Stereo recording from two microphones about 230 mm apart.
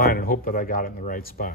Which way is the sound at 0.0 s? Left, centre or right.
Left.